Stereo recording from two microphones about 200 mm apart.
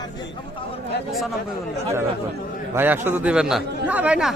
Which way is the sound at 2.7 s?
10° right (ahead or behind).